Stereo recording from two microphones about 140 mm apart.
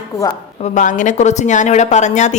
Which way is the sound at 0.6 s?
65° left (ahead or behind).